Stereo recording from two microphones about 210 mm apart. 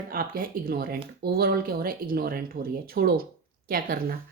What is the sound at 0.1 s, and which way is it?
Speech, 45° right (ahead or behind).